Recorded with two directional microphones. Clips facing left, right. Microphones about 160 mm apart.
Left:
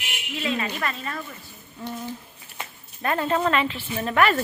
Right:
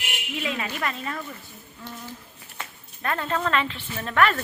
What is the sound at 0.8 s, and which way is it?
Speech, 15° right (ahead or behind).